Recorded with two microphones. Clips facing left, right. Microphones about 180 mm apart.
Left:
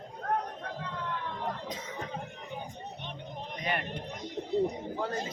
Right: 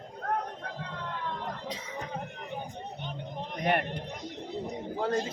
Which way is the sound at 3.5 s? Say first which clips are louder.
Right 6 dB; 55° right (ahead or behind).